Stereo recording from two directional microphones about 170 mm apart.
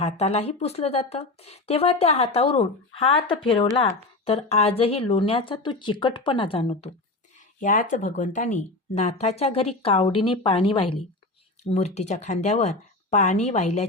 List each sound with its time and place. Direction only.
0.0 s speech: 35° left (ahead or behind)
7.3 s speech: 50° left (ahead or behind); by 10.9 s 30° left (ahead or behind)
11.7 s speech: 40° left (ahead or behind)